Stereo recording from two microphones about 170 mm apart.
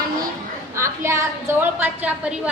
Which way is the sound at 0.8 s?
15° right (ahead or behind).